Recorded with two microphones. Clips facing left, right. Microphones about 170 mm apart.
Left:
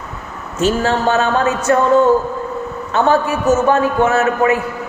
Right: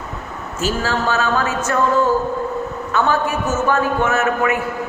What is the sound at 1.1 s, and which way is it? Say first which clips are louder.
Speech: left 4 dB; 35° left (ahead or behind).